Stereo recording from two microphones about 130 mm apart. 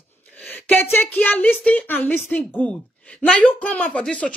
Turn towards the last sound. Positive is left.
turn(degrees=10)  # may be behind; listen again after turning